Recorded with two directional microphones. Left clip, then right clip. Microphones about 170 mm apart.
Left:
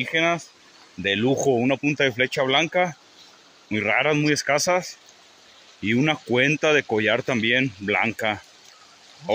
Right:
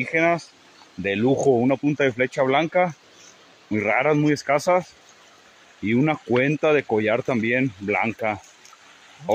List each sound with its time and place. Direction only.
0.0 s speech: 5° right (ahead or behind)
5.9 s speech: centre (ahead or behind)